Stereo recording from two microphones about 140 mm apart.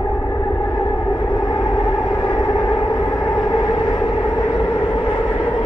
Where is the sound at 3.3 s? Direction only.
25° left (ahead or behind).